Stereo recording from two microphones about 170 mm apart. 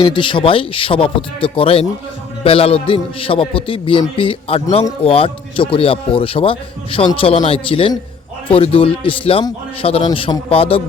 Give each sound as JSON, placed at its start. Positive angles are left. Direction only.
{"t": 0.0, "sound": "a man's voice", "side_deg": 30}